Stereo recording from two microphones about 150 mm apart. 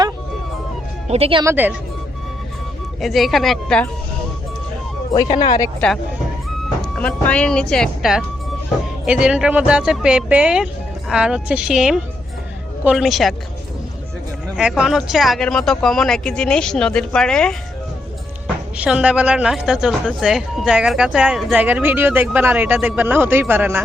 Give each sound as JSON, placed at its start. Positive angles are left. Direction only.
{"t": 1.0, "sound": "speech", "side_deg": -45}
{"t": 1.5, "sound": "speech", "side_deg": -10}
{"t": 3.0, "sound": "speech", "side_deg": 0}
{"t": 5.1, "sound": "speech", "side_deg": 30}
{"t": 6.8, "sound": "speech", "side_deg": 5}
{"t": 14.5, "sound": "speech", "side_deg": -5}
{"t": 18.8, "sound": "speech", "side_deg": -10}